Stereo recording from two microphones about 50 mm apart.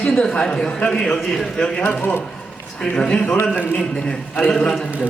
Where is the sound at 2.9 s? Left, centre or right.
Centre.